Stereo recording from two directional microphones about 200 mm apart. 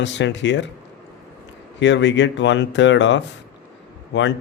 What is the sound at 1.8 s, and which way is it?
Speech, 60° left (ahead or behind).